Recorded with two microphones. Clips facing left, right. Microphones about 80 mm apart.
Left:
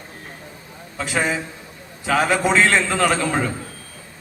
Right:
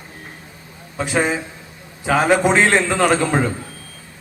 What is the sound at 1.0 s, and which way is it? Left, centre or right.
A man's voice, right.